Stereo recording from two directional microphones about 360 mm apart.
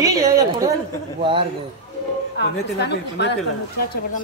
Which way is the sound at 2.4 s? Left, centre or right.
Left.